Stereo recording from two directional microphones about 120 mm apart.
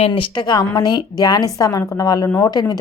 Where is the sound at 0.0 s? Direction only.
45° left (ahead or behind).